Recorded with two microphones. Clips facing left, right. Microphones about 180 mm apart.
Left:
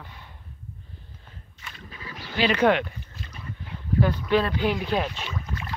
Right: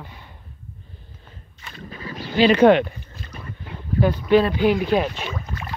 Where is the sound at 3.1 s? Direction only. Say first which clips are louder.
Right 2 dB; 45° right (ahead or behind).